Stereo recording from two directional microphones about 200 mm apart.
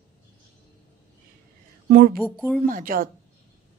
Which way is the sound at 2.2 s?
Centre (ahead or behind).